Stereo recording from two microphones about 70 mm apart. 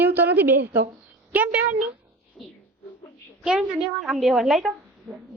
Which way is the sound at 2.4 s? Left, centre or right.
Centre.